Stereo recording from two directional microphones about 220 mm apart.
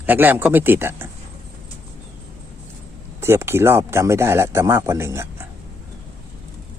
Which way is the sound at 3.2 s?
10° right (ahead or behind).